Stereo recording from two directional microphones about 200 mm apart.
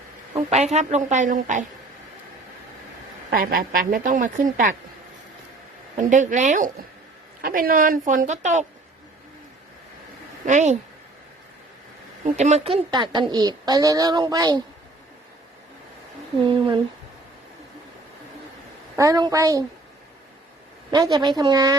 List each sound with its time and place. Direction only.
0.3 s a woman's voice: 35° right (ahead or behind)
3.2 s a woman's voice: 45° right (ahead or behind)
6.0 s a woman's voice: 40° right (ahead or behind)
10.4 s a woman's voice: 35° right (ahead or behind)
12.2 s a woman's voice: 35° right (ahead or behind); by 14.6 s 20° right (ahead or behind)
16.4 s a woman's voice: 25° right (ahead or behind)
18.9 s a woman's voice: 20° right (ahead or behind)
20.9 s a woman's voice: 20° right (ahead or behind)